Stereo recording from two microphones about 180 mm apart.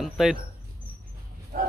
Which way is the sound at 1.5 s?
50° right (ahead or behind).